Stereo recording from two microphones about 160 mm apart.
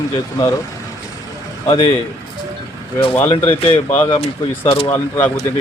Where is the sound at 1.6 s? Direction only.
25° left (ahead or behind).